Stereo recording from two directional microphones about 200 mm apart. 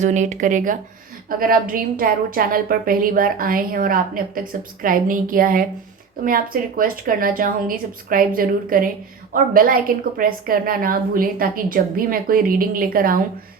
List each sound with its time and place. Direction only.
0.0 s a woman's voice: 35° right (ahead or behind)